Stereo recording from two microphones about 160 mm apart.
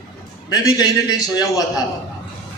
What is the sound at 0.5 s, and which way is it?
A man's voice, 25° left (ahead or behind).